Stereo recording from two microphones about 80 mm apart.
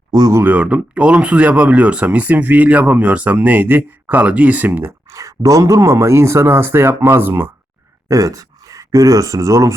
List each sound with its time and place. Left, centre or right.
0.2 s speech: right
0.4 s speech: centre
4.9 s speech: right
8.0 s speech: right